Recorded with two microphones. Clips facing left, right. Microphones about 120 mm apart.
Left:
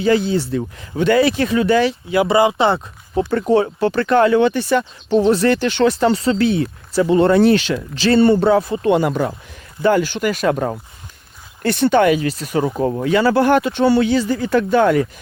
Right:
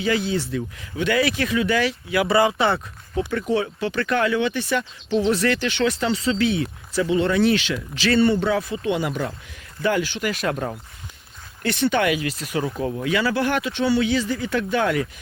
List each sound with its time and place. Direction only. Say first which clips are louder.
0.0 s speech: left 6 dB; 35° left (ahead or behind)
3.2 s speech: left 7 dB; 40° left (ahead or behind)
4.8 s speech: left 6 dB; 55° left (ahead or behind)
5.3 s speech: left 6 dB; 30° left (ahead or behind)
8.8 s speech: left 8 dB; 50° left (ahead or behind)